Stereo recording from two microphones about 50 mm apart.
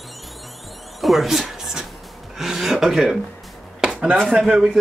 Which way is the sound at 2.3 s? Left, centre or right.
Centre.